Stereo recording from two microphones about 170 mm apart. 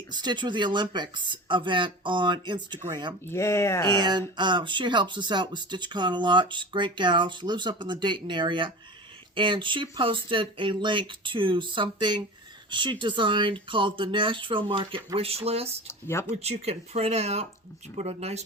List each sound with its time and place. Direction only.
0.1 s speech: 25° right (ahead or behind)
3.2 s speech: 15° left (ahead or behind)
3.8 s speech: 25° right (ahead or behind)
15.9 s speech: 15° left (ahead or behind)
16.3 s speech: 40° right (ahead or behind)